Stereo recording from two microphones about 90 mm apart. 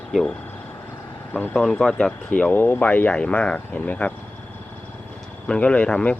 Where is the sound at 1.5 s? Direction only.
5° left (ahead or behind).